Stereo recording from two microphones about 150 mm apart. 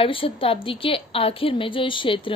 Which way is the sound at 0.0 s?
35° left (ahead or behind).